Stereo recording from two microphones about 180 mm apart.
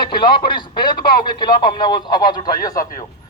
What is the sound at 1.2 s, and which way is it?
Speech, 25° left (ahead or behind).